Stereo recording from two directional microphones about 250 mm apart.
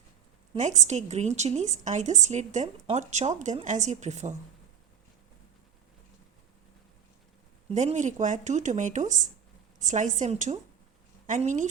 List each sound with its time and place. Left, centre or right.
0.5 s a woman's voice: right
7.7 s a woman's voice: right